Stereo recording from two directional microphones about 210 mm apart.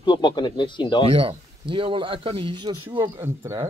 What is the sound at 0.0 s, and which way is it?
Speech, 20° left (ahead or behind).